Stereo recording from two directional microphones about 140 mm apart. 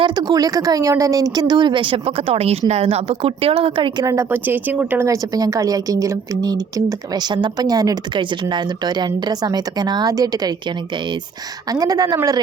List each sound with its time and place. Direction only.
0.0 s speech: 30° right (ahead or behind)
4.0 s a woman's voice: 25° right (ahead or behind)
11.7 s a woman's voice: 25° right (ahead or behind)